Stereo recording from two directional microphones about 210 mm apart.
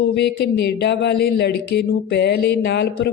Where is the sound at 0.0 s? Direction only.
50° left (ahead or behind).